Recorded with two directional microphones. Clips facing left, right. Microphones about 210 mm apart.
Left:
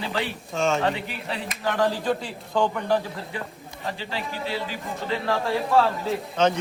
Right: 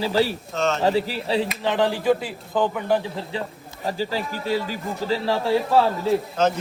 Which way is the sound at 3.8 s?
40° right (ahead or behind).